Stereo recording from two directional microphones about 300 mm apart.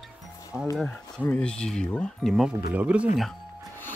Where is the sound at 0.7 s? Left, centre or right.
Centre.